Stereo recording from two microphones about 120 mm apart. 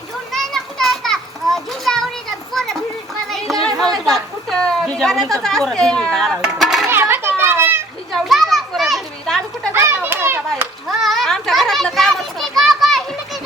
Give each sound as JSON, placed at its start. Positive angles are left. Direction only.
{"t": 0.3, "sound": "children playing", "side_deg": 5}
{"t": 3.2, "sound": "a sound", "side_deg": 0}
{"t": 6.8, "sound": "children playing", "side_deg": -20}
{"t": 8.1, "sound": "children playing", "side_deg": 0}
{"t": 9.7, "sound": "children playing", "side_deg": -20}
{"t": 10.8, "sound": "children playing", "side_deg": 0}